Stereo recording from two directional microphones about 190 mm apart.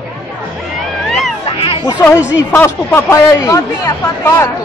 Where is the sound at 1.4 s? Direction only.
30° left (ahead or behind).